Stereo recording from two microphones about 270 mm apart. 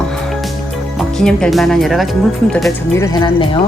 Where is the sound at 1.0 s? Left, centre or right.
Centre.